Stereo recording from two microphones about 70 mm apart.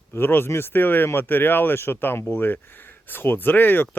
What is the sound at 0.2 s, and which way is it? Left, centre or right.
Speech, left.